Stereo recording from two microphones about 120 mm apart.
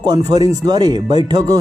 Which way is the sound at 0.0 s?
35° right (ahead or behind).